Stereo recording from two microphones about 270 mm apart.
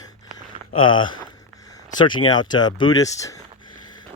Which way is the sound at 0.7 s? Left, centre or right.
Centre.